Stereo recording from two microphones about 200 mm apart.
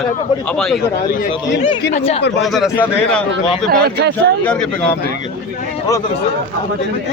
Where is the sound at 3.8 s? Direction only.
55° right (ahead or behind).